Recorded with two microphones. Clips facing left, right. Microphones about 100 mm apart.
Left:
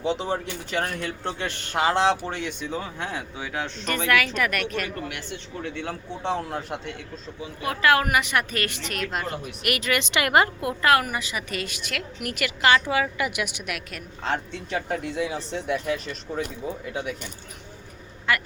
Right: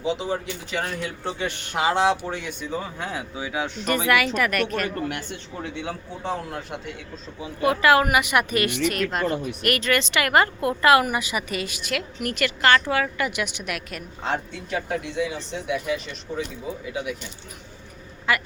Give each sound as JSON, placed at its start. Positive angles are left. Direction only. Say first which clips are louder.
{"t": 0.0, "sound": "a woman's voice", "louder": "even", "side_deg": 0}
{"t": 8.9, "sound": "a woman's voice", "louder": "right 5 dB", "side_deg": 0}
{"t": 10.6, "sound": "a woman's voice", "louder": "right 3 dB", "side_deg": 5}
{"t": 10.9, "sound": "a woman's voice", "louder": "right 3 dB", "side_deg": -10}
{"t": 18.3, "sound": "a woman's voice", "louder": "right 1 dB", "side_deg": -5}